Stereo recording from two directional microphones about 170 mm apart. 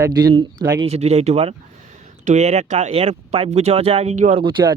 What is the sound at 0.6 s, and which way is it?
Speech, 20° right (ahead or behind).